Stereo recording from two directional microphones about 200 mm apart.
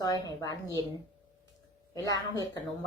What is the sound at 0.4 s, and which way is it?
Speech, 15° left (ahead or behind).